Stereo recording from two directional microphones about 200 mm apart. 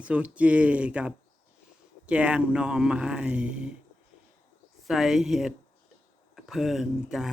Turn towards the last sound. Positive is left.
turn(degrees=0)  # may be behind; listen again after turning